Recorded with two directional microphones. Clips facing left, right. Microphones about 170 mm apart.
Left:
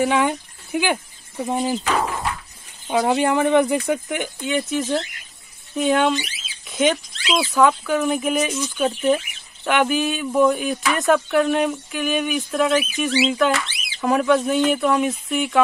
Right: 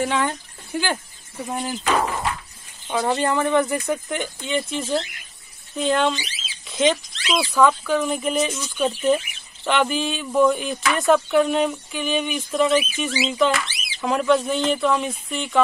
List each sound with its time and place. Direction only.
0.0 s speech: 10° left (ahead or behind)
2.9 s speech: 10° left (ahead or behind)